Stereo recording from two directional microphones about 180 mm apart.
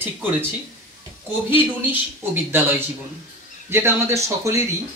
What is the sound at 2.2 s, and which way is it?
Speech, 10° right (ahead or behind).